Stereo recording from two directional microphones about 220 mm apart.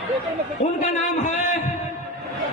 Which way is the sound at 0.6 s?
35° left (ahead or behind).